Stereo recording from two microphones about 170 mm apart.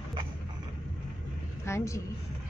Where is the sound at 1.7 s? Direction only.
15° left (ahead or behind).